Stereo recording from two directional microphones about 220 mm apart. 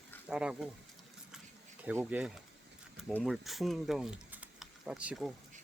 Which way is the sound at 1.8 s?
5° right (ahead or behind).